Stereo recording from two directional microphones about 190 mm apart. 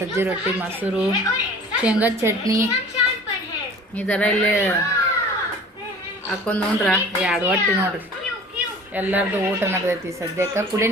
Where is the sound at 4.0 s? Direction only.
5° left (ahead or behind).